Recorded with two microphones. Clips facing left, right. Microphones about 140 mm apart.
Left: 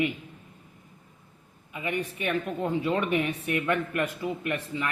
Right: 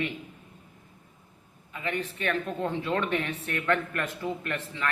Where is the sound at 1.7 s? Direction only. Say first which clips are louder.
Left 1 dB; 15° left (ahead or behind).